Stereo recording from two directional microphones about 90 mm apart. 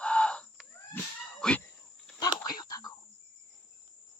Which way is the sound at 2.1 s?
45° left (ahead or behind).